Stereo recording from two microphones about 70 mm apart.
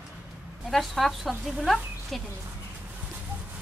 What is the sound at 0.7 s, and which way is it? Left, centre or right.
Speech, centre.